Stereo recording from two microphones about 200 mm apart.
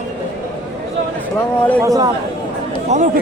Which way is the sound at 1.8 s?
15° right (ahead or behind).